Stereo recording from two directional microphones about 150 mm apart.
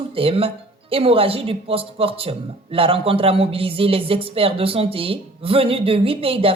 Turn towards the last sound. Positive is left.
turn(degrees=-40)  # may be behind; listen again after turning